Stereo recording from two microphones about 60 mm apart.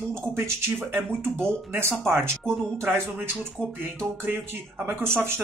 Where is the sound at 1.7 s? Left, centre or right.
Right.